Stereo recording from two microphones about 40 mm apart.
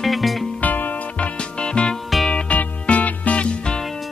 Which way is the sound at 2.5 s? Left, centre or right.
Left.